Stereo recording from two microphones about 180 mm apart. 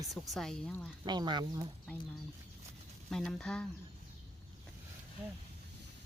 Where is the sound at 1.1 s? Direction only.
25° right (ahead or behind).